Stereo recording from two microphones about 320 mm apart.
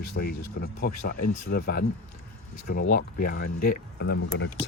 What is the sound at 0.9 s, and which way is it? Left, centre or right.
Speech, left.